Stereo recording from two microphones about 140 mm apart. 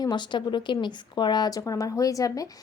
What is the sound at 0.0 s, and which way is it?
A woman's voice, 30° left (ahead or behind).